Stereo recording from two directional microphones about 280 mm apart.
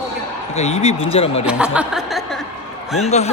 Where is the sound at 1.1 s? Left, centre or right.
Left.